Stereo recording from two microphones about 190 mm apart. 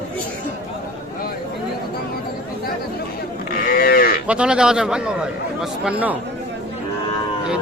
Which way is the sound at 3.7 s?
50° left (ahead or behind).